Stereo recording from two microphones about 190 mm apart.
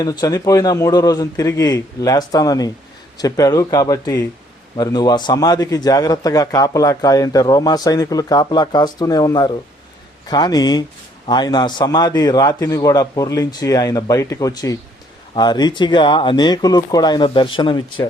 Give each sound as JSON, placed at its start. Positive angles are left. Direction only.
{"t": 0.0, "sound": "a man's voice", "side_deg": 20}